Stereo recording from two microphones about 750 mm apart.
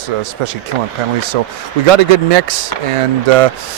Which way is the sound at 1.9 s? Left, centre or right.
Right.